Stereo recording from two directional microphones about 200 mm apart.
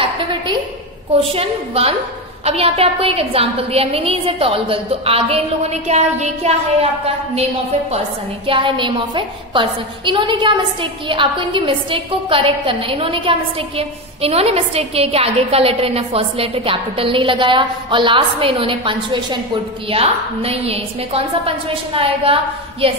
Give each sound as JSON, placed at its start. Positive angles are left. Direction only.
{"t": 0.0, "sound": "a sound", "side_deg": -25}
{"t": 1.3, "sound": "a woman's voice", "side_deg": -30}
{"t": 8.5, "sound": "a woman's voice", "side_deg": -25}